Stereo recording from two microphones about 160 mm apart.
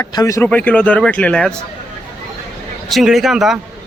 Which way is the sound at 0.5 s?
10° left (ahead or behind).